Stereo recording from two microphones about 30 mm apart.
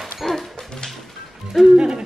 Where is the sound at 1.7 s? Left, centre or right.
Right.